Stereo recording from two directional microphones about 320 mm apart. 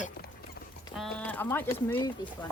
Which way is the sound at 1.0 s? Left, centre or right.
Centre.